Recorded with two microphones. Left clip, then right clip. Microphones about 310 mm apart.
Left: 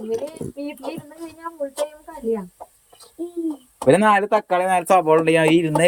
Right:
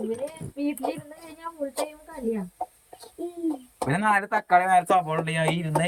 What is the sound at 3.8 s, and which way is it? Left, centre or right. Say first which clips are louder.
Speech: left 8 dB; centre.